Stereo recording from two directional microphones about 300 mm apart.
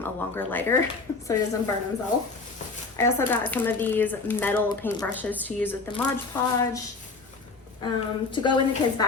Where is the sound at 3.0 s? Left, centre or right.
Centre.